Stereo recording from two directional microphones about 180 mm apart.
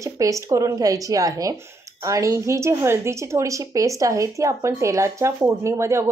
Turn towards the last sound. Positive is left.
turn(degrees=-15)  # may be behind; listen again after turning